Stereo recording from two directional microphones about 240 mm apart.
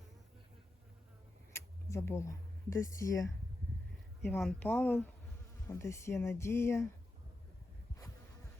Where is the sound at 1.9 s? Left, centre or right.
Centre.